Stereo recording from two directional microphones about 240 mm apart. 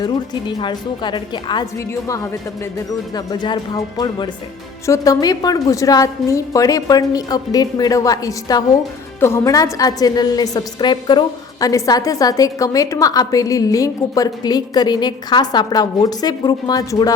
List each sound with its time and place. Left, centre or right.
0.0 s a woman's voice: centre